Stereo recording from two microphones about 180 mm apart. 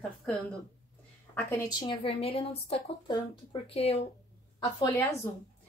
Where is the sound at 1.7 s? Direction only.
25° left (ahead or behind).